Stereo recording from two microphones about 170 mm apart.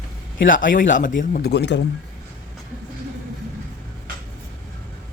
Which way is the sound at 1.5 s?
85° left.